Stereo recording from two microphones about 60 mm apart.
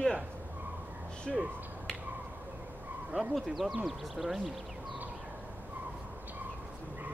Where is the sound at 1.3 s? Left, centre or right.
Centre.